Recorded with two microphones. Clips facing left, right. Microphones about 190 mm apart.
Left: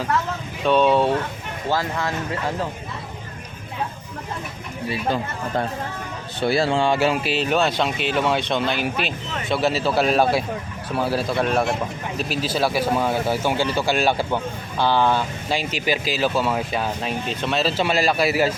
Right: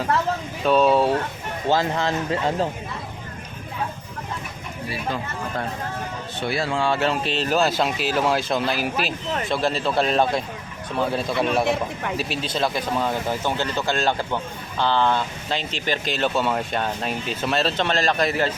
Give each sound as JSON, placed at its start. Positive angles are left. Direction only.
{"t": 0.6, "sound": "speech", "side_deg": 0}
{"t": 1.7, "sound": "speech", "side_deg": -20}
{"t": 6.4, "sound": "speech", "side_deg": 30}